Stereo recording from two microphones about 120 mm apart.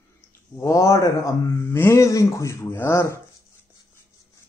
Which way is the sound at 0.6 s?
25° left (ahead or behind).